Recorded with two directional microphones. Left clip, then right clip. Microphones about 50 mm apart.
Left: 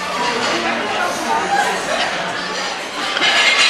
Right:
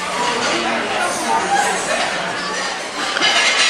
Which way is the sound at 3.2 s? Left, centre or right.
Centre.